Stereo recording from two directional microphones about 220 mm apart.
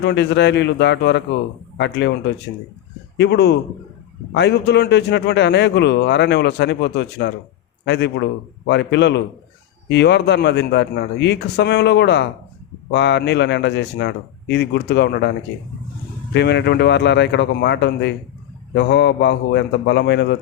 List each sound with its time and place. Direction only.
0.0 s a man's voice: 50° left (ahead or behind)
3.2 s a man's voice: 50° left (ahead or behind)
16.3 s a man's voice: 50° left (ahead or behind)